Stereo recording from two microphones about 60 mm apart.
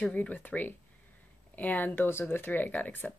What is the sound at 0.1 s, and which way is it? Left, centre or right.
Speech, left.